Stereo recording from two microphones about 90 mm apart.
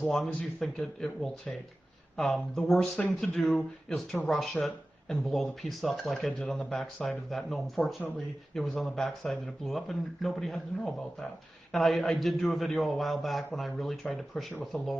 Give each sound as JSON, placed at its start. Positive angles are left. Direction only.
{"t": 0.1, "sound": "speech", "side_deg": 5}
{"t": 3.0, "sound": "speech", "side_deg": 15}
{"t": 3.3, "sound": "speech", "side_deg": 5}